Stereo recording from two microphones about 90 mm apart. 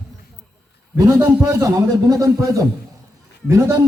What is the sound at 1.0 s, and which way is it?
A man's voice, 40° right (ahead or behind).